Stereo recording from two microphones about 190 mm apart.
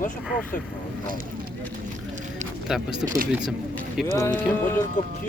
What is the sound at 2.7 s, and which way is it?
Speech, 5° right (ahead or behind).